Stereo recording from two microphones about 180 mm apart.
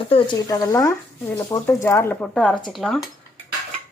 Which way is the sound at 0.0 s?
30° left (ahead or behind).